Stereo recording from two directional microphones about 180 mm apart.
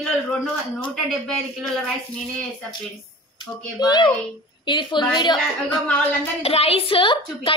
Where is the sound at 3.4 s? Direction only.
25° left (ahead or behind).